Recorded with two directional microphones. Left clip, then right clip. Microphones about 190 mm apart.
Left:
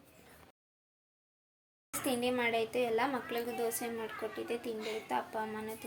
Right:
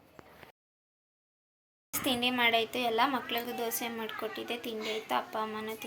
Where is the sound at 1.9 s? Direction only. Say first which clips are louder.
Right 3 dB; 10° left (ahead or behind).